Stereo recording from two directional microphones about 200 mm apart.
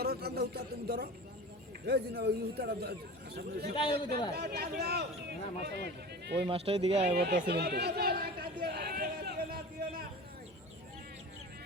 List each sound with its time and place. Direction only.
0.0 s a man's voice: 50° right (ahead or behind)
3.8 s a man's voice: 25° left (ahead or behind)
4.4 s speech: 55° right (ahead or behind)
6.5 s speech: 30° right (ahead or behind)
7.2 s chatter: 55° right (ahead or behind)